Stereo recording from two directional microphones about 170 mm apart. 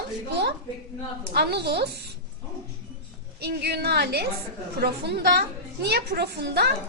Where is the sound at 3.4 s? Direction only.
70° right (ahead or behind).